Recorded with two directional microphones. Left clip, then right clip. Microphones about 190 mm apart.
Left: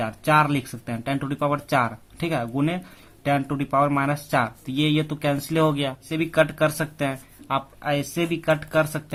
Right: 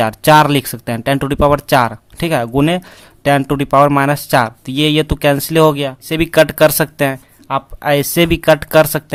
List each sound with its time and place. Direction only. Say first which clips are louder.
0.0 s speech: right 11 dB; 40° right (ahead or behind)
6.1 s speech: right 10 dB; 40° right (ahead or behind)